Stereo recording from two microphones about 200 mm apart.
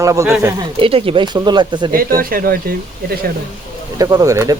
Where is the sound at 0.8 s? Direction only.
25° right (ahead or behind).